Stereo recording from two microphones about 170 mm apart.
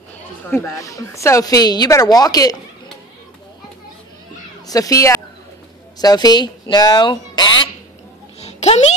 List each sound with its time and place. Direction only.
0.5 s speech: 20° left (ahead or behind)
4.6 s speech: 20° left (ahead or behind)
8.4 s a sound: 40° left (ahead or behind)